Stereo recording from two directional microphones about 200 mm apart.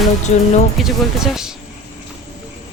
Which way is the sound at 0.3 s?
35° left (ahead or behind).